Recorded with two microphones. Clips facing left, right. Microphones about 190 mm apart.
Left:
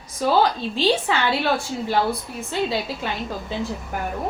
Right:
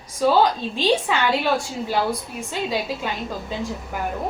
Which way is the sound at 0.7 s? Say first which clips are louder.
Left 1 dB; 15° right (ahead or behind).